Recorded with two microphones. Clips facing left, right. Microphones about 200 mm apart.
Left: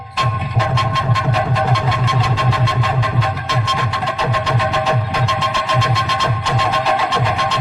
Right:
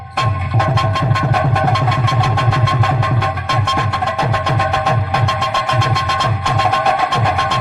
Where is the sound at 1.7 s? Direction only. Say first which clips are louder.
Right 1 dB; 60° right (ahead or behind).